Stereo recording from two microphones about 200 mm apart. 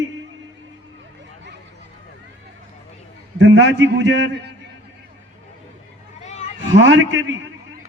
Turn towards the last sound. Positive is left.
turn(degrees=-70)  # may be behind; listen again after turning